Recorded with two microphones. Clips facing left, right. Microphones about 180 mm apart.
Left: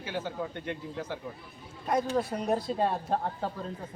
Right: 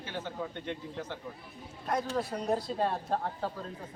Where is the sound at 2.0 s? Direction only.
20° left (ahead or behind).